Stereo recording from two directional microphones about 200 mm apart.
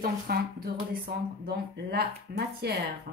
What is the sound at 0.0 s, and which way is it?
A woman's voice, 50° right (ahead or behind).